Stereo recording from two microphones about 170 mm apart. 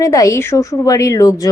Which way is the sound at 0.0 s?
20° left (ahead or behind).